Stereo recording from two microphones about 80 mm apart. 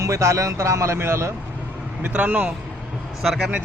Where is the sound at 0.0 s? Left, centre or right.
Right.